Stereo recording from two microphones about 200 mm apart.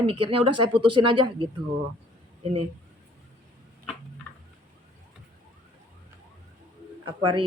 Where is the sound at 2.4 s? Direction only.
30° right (ahead or behind).